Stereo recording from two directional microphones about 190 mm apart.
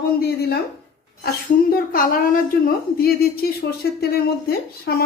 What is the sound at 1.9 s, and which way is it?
A woman's voice, 50° left (ahead or behind).